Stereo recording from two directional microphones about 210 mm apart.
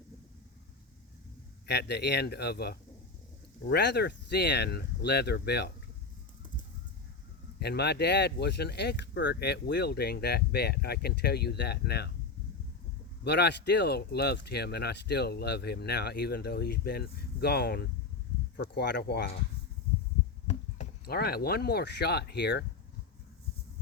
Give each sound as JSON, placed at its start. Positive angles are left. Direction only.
{"t": 1.6, "sound": "speech", "side_deg": 50}
{"t": 7.6, "sound": "speech", "side_deg": 50}
{"t": 13.2, "sound": "speech", "side_deg": 50}
{"t": 21.0, "sound": "speech", "side_deg": 50}